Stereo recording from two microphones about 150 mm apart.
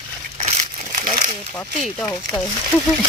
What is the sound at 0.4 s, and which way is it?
Crumpling, 50° right (ahead or behind).